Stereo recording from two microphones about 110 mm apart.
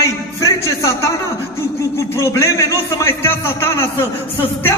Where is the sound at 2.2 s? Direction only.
25° left (ahead or behind).